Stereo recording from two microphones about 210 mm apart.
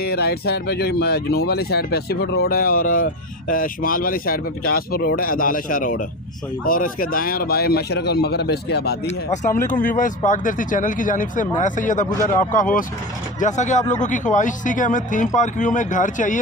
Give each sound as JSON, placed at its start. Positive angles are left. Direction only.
{"t": 0.0, "sound": "speech", "side_deg": 50}
{"t": 9.0, "sound": "speech", "side_deg": 35}